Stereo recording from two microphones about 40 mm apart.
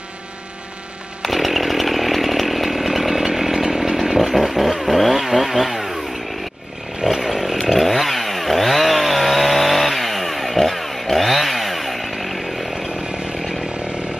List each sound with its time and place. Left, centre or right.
1.2 s chainsaw: centre
7.0 s chainsaw: centre
13.1 s chainsaw: right